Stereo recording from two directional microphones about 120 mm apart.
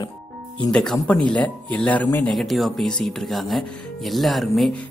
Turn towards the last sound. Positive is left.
turn(degrees=0)  # may be behind; listen again after turning